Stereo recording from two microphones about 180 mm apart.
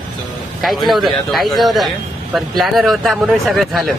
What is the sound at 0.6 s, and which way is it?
Speech, centre (ahead or behind).